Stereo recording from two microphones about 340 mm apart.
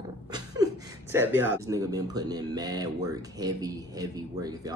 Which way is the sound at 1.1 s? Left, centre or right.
Centre.